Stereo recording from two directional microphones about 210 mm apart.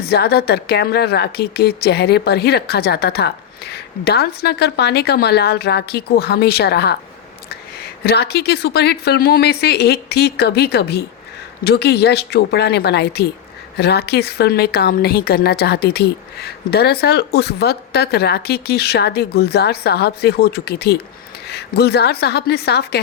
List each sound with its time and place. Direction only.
0.0 s a woman's voice: 50° left (ahead or behind)
8.0 s a woman's voice: 50° left (ahead or behind)